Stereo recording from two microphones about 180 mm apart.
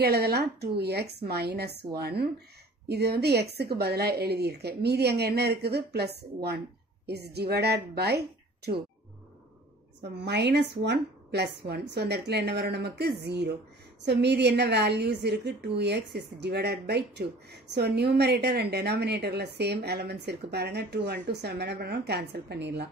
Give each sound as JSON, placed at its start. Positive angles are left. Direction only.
{"t": 0.0, "sound": "a woman's voice", "side_deg": -65}
{"t": 10.1, "sound": "a woman's voice", "side_deg": -70}